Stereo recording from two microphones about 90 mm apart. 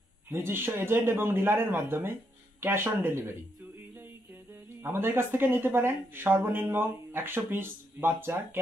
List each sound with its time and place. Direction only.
0.3 s speech: 25° right (ahead or behind)
4.8 s speech: 25° right (ahead or behind)